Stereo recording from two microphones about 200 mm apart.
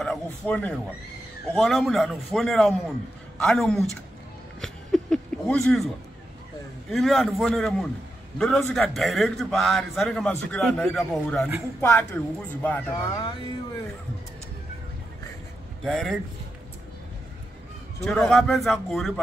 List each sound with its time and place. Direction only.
0.0 s a sound: 5° left (ahead or behind)
1.5 s a man's voice: centre (ahead or behind)
4.6 s a sound: 5° left (ahead or behind)
6.9 s a man's voice: centre (ahead or behind); by 13.3 s 15° left (ahead or behind)
15.8 s a man's voice: centre (ahead or behind)
18.0 s a man's voice: 5° left (ahead or behind)